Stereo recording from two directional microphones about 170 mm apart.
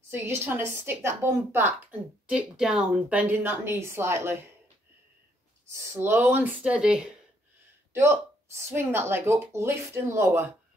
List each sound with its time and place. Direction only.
0.1 s a woman's voice: 15° right (ahead or behind)
5.7 s a woman's voice: 15° right (ahead or behind)